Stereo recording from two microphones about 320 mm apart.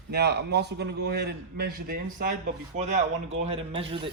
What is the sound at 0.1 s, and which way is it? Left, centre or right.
A man's voice, right.